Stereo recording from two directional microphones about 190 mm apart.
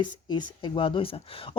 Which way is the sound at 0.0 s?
25° left (ahead or behind).